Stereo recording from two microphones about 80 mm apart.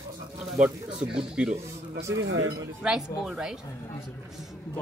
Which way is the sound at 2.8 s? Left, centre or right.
Centre.